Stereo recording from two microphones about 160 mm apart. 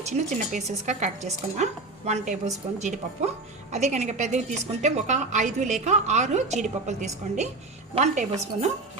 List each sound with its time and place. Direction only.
0.1 s a woman's voice: 45° right (ahead or behind)